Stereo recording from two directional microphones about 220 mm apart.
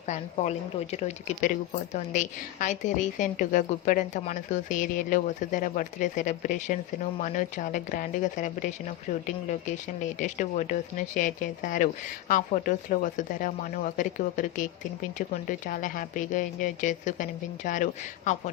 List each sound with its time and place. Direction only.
0.0 s a woman's voice: 30° left (ahead or behind)